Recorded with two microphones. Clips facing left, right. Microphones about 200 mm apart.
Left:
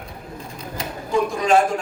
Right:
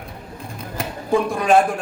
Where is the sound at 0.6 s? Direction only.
55° right (ahead or behind).